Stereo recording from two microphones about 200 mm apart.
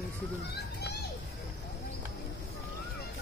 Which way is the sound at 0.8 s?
55° left (ahead or behind).